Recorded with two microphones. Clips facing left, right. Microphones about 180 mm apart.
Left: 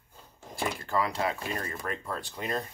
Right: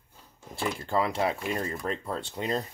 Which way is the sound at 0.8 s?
25° right (ahead or behind).